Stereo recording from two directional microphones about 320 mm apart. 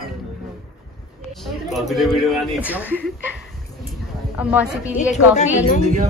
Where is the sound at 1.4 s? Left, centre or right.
Centre.